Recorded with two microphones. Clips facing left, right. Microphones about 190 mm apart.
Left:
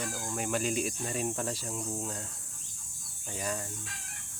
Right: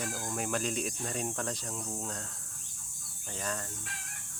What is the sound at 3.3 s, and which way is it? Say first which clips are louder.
Speech: left 2 dB; 10° left (ahead or behind).